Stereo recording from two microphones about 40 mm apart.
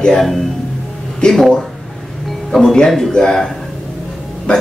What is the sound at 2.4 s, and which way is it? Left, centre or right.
Speech, centre.